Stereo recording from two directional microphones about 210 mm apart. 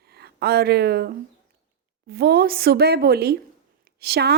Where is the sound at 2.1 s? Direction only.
50° right (ahead or behind).